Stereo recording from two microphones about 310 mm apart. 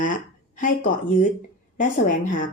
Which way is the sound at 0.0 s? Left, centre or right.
Left.